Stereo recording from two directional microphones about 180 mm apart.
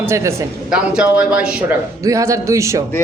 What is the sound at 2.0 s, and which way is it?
Speech, 15° right (ahead or behind).